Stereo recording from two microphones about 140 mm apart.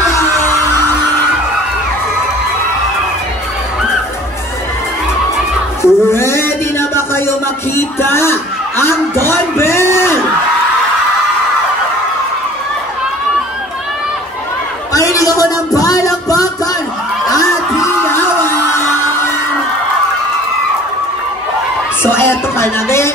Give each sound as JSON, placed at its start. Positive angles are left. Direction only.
{"t": 5.8, "sound": "music", "side_deg": 20}
{"t": 14.9, "sound": "music", "side_deg": 25}
{"t": 18.0, "sound": "music", "side_deg": 15}
{"t": 22.0, "sound": "music", "side_deg": 15}